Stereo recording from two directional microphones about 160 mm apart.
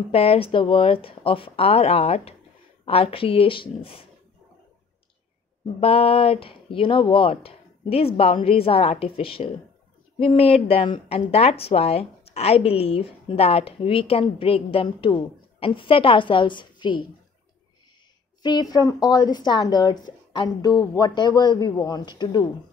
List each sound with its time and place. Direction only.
0.1 s speech: 35° left (ahead or behind)
5.8 s speech: 35° left (ahead or behind)
18.4 s a man's voice: 25° left (ahead or behind)